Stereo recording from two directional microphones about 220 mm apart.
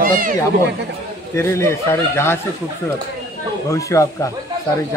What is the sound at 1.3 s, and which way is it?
Speech, 10° left (ahead or behind).